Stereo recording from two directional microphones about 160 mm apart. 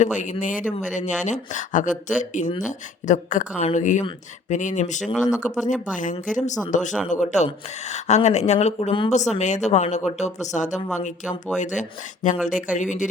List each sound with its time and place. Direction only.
0.0 s speech: 50° left (ahead or behind)